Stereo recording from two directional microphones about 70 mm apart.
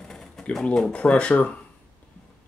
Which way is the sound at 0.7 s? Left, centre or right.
Centre.